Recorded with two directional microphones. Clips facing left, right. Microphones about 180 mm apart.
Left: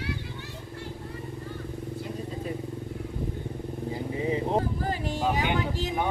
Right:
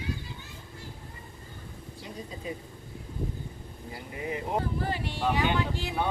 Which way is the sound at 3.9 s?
25° left (ahead or behind).